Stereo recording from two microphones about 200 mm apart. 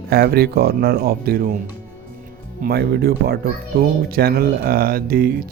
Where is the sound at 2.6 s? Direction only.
50° right (ahead or behind).